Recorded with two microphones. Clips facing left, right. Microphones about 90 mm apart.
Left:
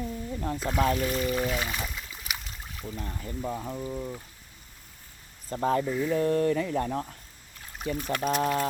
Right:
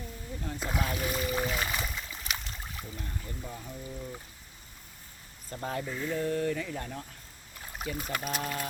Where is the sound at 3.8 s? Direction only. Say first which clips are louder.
Left 7 dB; 35° left (ahead or behind).